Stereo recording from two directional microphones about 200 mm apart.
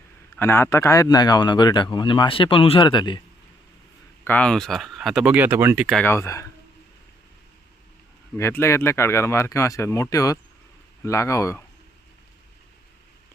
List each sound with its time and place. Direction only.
0.3 s a man's voice: 10° left (ahead or behind)
4.2 s speech: 10° left (ahead or behind)
6.0 s speech: 15° left (ahead or behind)
8.4 s speech: 15° left (ahead or behind)